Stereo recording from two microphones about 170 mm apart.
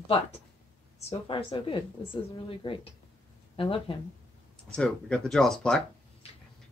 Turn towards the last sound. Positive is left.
turn(degrees=5)  # may be behind; listen again after turning